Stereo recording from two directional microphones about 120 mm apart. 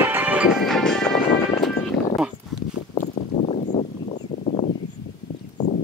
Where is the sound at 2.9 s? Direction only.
80° left.